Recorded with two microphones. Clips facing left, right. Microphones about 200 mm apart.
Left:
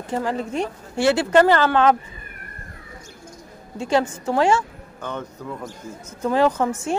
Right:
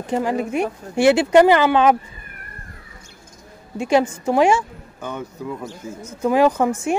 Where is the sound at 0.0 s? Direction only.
15° right (ahead or behind).